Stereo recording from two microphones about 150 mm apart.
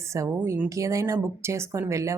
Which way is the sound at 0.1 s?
20° right (ahead or behind).